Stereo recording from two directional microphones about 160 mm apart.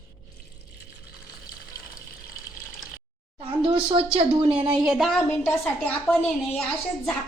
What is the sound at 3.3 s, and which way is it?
Speech, 35° right (ahead or behind).